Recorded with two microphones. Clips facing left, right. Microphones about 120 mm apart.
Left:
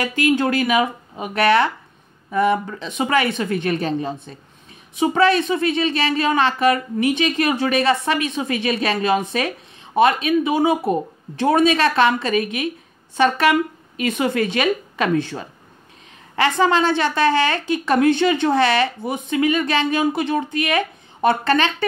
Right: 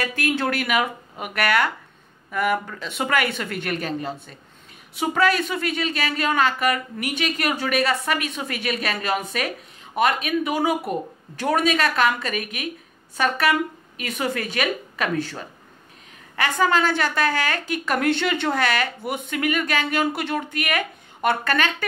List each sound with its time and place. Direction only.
0.0 s a woman's voice: 15° left (ahead or behind)